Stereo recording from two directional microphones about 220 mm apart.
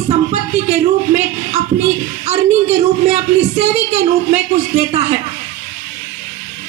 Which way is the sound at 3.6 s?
30° right (ahead or behind).